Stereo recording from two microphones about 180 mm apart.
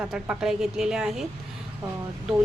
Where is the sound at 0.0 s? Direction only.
5° right (ahead or behind).